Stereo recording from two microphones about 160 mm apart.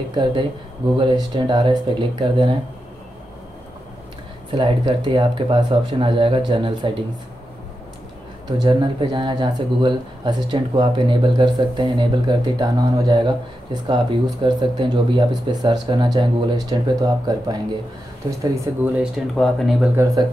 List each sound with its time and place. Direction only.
0.1 s speech: 30° right (ahead or behind)
4.6 s speech: 30° right (ahead or behind)
8.5 s speech: 25° right (ahead or behind)
18.4 s speech: 15° right (ahead or behind)
19.1 s speech: centre (ahead or behind)